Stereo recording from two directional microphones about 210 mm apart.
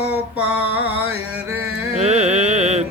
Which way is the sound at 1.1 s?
90° right.